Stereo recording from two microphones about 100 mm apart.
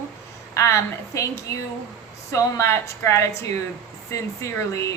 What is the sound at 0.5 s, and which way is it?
Speech, 30° left (ahead or behind).